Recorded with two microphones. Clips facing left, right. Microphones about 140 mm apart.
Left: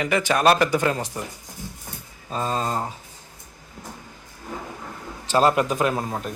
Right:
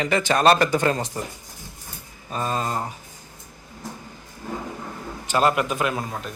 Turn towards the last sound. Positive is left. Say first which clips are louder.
# left 2 dB
turn(degrees=25)  # may be behind; listen again after turning